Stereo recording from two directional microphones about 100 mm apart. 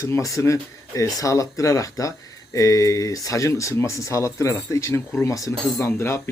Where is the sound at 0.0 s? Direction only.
35° left (ahead or behind).